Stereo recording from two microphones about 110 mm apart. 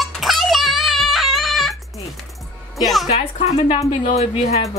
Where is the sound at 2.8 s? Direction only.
Centre (ahead or behind).